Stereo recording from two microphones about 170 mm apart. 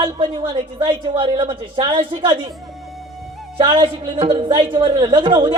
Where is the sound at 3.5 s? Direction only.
30° right (ahead or behind).